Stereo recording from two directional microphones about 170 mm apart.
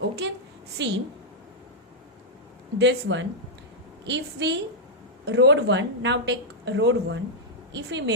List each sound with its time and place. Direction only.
0.8 s speech: 90° right
2.7 s speech: 90° right